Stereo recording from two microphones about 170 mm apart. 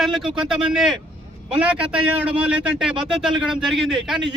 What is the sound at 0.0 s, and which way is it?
A man's voice, centre (ahead or behind).